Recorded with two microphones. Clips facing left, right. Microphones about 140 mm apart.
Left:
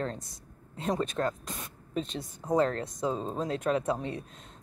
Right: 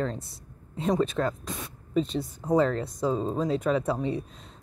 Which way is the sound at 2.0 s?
Centre (ahead or behind).